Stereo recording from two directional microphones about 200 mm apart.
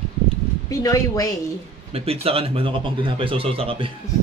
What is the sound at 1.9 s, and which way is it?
Speech, 30° right (ahead or behind).